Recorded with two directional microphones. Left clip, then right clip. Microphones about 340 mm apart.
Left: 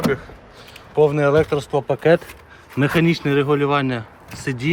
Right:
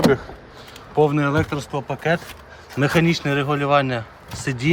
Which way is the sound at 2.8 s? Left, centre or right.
Centre.